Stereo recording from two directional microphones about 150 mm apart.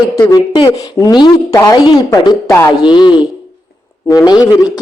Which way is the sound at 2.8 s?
30° left (ahead or behind).